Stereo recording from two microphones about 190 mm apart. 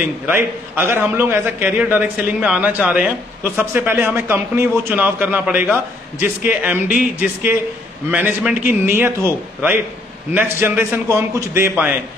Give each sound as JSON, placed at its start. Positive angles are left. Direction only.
{"t": 0.0, "sound": "a man's voice", "side_deg": -10}
{"t": 8.1, "sound": "a man's voice", "side_deg": -10}